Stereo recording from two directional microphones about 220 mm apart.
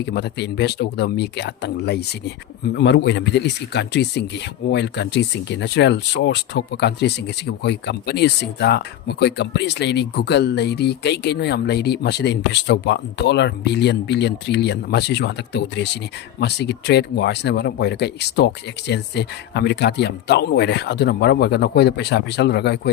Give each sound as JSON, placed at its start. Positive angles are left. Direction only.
{"t": 0.0, "sound": "speech", "side_deg": 50}